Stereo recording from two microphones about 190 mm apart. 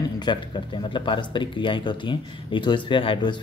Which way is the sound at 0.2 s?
25° left (ahead or behind).